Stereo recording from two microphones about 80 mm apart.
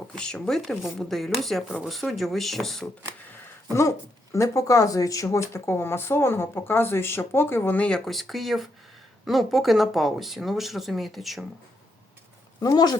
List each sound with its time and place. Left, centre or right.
0.2 s speech: centre
3.7 s speech: left
7.8 s speech: centre
12.6 s speech: left